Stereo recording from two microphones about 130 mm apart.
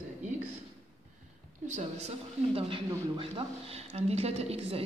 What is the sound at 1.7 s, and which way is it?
A woman's voice, 60° right (ahead or behind).